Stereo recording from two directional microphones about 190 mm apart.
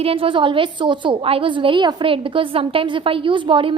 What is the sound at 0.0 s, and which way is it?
A woman's voice, 30° right (ahead or behind).